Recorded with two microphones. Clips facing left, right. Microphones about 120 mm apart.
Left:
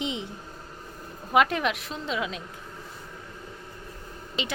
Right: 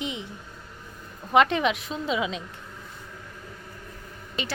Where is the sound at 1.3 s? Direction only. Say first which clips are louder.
Right 2 dB; 5° left (ahead or behind).